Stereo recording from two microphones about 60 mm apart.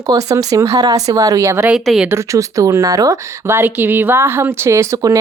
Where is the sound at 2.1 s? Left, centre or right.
Right.